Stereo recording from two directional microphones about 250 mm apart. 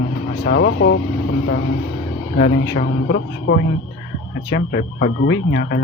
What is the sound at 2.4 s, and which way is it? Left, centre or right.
Speech, left.